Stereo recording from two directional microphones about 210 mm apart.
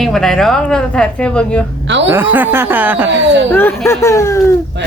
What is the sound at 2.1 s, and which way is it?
Speech, 10° right (ahead or behind).